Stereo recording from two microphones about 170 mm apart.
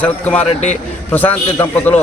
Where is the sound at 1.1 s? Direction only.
10° left (ahead or behind).